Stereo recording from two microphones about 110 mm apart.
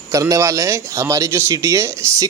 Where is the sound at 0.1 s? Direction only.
30° right (ahead or behind).